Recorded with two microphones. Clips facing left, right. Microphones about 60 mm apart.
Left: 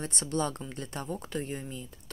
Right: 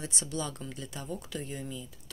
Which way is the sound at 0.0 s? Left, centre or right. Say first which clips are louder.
Left 5 dB; left.